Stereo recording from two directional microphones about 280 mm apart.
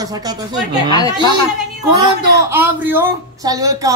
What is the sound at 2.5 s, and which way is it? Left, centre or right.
A man's voice, centre.